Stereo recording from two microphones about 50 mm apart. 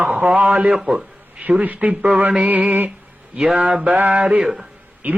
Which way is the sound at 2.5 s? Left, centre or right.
Right.